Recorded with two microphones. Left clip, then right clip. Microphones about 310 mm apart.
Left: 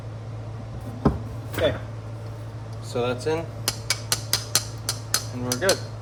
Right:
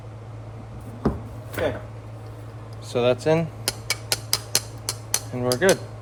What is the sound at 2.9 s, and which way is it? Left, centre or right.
Speech, right.